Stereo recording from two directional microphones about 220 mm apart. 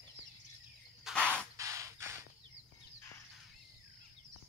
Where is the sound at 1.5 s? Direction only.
15° right (ahead or behind).